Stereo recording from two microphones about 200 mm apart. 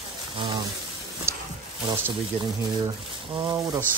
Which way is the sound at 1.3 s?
15° right (ahead or behind).